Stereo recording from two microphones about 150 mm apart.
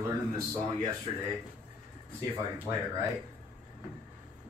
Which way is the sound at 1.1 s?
30° right (ahead or behind).